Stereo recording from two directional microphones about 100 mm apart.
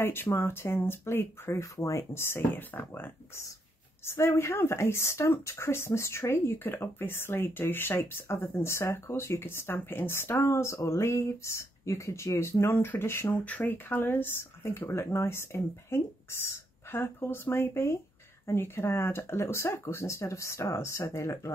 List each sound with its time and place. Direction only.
0.0 s speech: 25° left (ahead or behind)